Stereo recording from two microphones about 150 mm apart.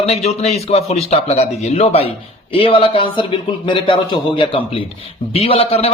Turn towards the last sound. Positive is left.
turn(degrees=40)  # may be behind; listen again after turning